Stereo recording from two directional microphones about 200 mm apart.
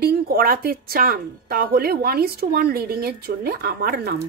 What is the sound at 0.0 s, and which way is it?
A woman's voice, 50° right (ahead or behind).